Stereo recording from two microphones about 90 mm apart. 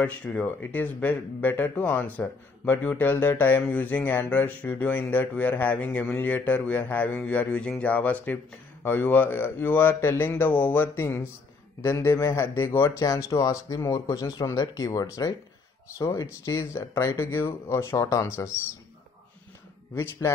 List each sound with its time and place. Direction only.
0.0 s speech: 20° left (ahead or behind)
3.6 s mantra: 15° left (ahead or behind)
8.8 s speech: 20° left (ahead or behind)
13.0 s speech: 35° left (ahead or behind)
19.9 s speech: 30° left (ahead or behind)